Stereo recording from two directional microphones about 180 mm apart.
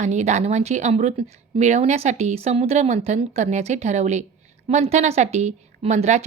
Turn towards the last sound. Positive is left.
turn(degrees=-40)  # may be behind; listen again after turning